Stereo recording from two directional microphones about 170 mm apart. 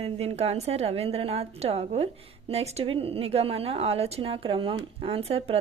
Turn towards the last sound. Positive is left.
turn(degrees=-35)  # may be behind; listen again after turning